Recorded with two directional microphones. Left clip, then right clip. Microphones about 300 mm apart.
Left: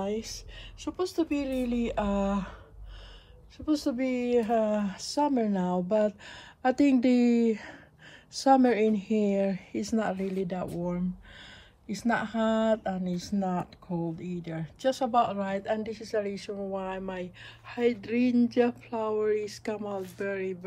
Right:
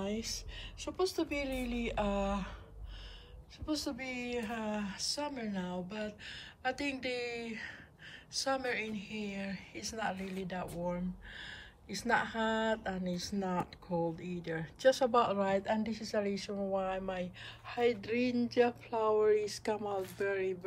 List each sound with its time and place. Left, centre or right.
0.0 s a woman's voice: centre
3.5 s a woman's voice: centre
11.3 s a sound: centre
13.0 s a woman's voice: centre
13.6 s speech: left
14.1 s a woman's voice: centre